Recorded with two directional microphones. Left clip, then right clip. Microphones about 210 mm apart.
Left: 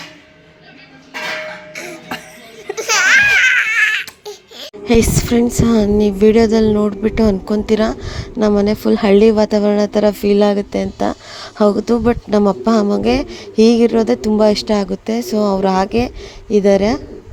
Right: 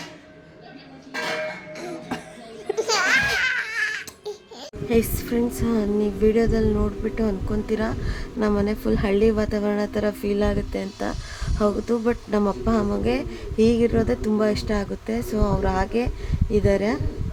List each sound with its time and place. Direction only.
1.7 s music: 20° right (ahead or behind)
2.7 s baby laughter: 15° right (ahead or behind)
4.0 s baby cry: 10° right (ahead or behind)
4.9 s a sound: 35° left (ahead or behind)